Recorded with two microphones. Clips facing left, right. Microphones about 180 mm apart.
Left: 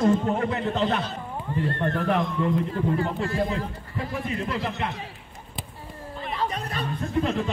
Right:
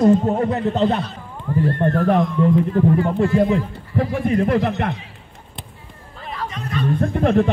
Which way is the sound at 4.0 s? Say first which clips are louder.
Right 11 dB; 55° right (ahead or behind).